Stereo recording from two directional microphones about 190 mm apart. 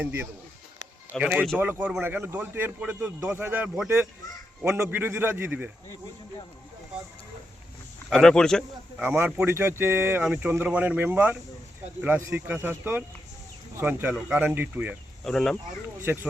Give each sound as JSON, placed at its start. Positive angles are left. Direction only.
{"t": 0.0, "sound": "a man's voice", "side_deg": -10}
{"t": 8.1, "sound": "a man's voice", "side_deg": 5}
{"t": 15.2, "sound": "speech", "side_deg": 0}
{"t": 16.1, "sound": "a man's voice", "side_deg": -10}